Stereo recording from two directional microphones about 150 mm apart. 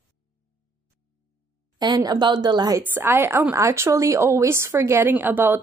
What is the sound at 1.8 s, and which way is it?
A woman's voice, 25° right (ahead or behind).